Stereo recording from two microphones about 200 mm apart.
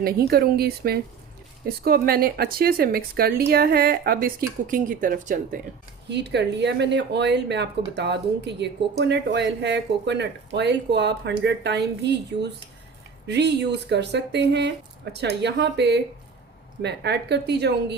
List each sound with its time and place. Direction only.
0.0 s speech: 50° right (ahead or behind)
6.1 s speech: 60° right (ahead or behind)